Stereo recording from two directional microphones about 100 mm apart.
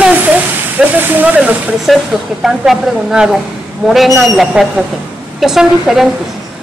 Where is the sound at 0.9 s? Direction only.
20° right (ahead or behind).